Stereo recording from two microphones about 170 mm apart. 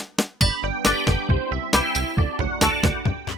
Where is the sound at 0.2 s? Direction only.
Centre (ahead or behind).